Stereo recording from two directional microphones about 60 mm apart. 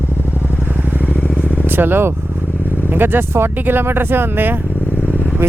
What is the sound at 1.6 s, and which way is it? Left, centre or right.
Speech, right.